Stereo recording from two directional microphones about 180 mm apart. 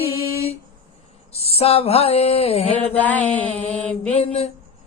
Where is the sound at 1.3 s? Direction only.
35° left (ahead or behind).